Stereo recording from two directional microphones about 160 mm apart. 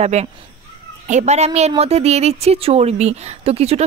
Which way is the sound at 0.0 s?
45° right (ahead or behind).